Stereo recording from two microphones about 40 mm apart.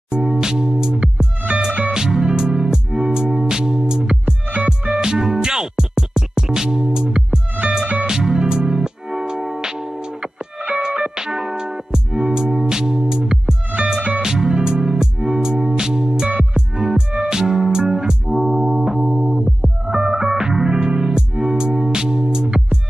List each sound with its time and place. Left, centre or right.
0.1 s music: centre; by 2.0 s right
2.0 s music: centre
18.2 s music: centre